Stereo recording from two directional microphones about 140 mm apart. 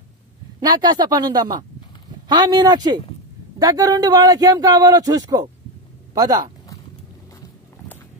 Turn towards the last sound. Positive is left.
turn(degrees=-30)  # may be behind; listen again after turning